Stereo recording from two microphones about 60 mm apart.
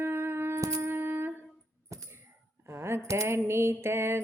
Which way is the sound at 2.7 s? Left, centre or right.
Right.